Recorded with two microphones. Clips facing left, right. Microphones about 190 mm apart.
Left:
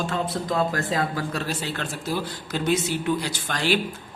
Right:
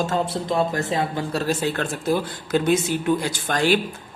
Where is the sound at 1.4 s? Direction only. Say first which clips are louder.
Right 6 dB; 45° right (ahead or behind).